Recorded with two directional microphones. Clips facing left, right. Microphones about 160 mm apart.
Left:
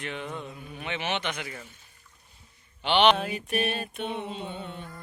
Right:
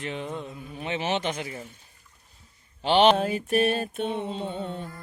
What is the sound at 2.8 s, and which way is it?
Mantra, 35° right (ahead or behind).